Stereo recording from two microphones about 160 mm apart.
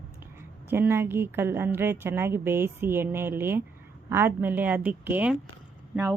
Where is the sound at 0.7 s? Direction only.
15° right (ahead or behind).